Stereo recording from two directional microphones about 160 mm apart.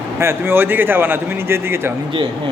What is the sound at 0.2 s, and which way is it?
A man's voice, 15° right (ahead or behind).